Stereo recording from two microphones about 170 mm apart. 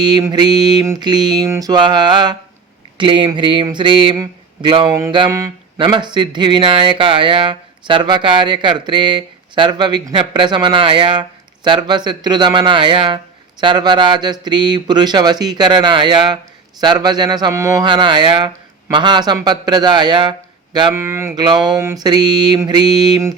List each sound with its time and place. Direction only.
0.0 s speech: 25° right (ahead or behind)
20.9 s a sound: 15° right (ahead or behind)
22.0 s speech: 25° right (ahead or behind)